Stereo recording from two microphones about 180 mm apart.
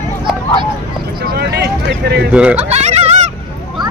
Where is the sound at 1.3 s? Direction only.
65° right (ahead or behind).